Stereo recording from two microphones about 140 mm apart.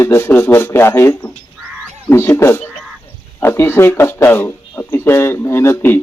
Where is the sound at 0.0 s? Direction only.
20° left (ahead or behind).